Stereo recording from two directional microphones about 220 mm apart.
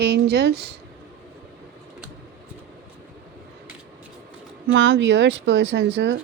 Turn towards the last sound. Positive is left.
turn(degrees=-50)  # may be behind; listen again after turning